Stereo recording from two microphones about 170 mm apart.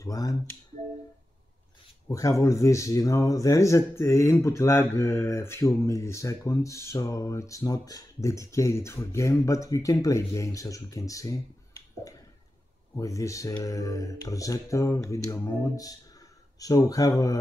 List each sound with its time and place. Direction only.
0.0 s speech: 20° left (ahead or behind)
2.0 s speech: 20° left (ahead or behind)
12.9 s speech: 20° left (ahead or behind)